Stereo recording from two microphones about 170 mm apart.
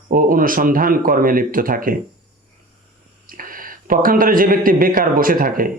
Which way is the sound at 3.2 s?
55° right (ahead or behind).